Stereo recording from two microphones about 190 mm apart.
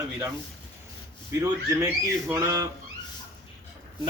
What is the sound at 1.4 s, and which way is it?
Speech, 15° right (ahead or behind).